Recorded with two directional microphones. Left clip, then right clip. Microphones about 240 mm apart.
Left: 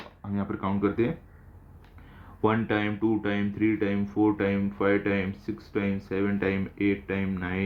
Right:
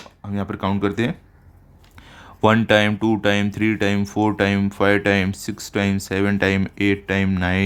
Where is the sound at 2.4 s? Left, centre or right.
Right.